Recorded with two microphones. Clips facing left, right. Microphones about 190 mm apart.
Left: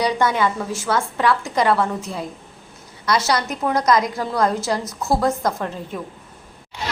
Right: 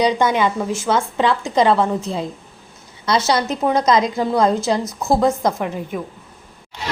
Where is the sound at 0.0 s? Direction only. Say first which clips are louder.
Right 3 dB; 20° right (ahead or behind).